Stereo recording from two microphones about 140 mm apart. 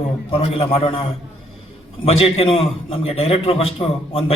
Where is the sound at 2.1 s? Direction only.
45° left (ahead or behind).